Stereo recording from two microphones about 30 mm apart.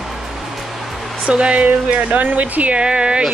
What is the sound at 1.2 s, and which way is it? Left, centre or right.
Speech, right.